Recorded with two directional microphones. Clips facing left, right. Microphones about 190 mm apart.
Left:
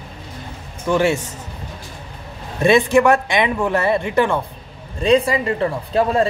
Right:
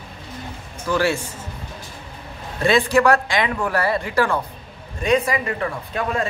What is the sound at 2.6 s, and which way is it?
A woman's voice, 20° left (ahead or behind).